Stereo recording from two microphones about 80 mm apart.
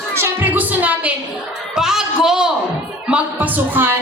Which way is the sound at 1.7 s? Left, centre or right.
Centre.